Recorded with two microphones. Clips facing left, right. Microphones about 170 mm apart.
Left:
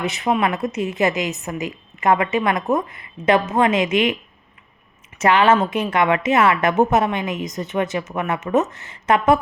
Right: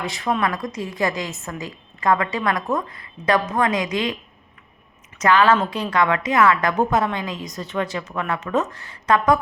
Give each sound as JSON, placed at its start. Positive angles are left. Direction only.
{"t": 0.0, "sound": "a woman's voice", "side_deg": 20}
{"t": 5.2, "sound": "a woman's voice", "side_deg": 25}